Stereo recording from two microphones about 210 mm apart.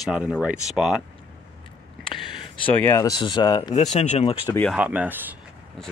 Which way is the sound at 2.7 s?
10° left (ahead or behind).